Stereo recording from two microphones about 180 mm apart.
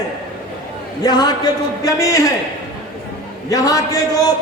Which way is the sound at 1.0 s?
20° left (ahead or behind).